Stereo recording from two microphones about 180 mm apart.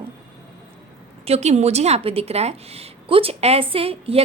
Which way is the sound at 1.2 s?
35° right (ahead or behind).